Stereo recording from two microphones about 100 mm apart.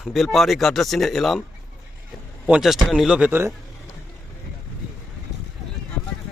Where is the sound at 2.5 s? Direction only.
5° right (ahead or behind).